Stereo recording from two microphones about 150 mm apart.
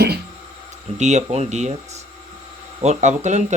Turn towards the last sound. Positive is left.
turn(degrees=-50)  # may be behind; listen again after turning